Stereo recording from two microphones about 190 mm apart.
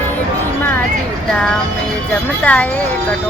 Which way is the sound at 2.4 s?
5° left (ahead or behind).